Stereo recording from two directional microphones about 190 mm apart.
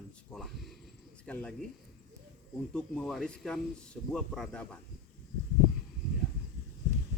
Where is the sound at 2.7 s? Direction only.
5° left (ahead or behind).